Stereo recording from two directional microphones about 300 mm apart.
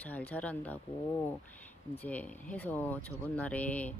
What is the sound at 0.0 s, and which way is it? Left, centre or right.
Speech, centre.